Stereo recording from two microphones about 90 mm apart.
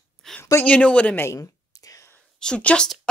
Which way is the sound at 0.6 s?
15° left (ahead or behind).